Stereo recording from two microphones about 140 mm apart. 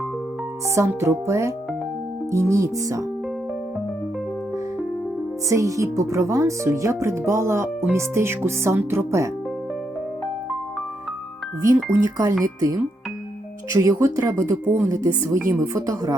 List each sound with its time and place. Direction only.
0.8 s speech: 20° right (ahead or behind)
5.5 s speech: 20° right (ahead or behind)
11.6 s speech: 25° right (ahead or behind)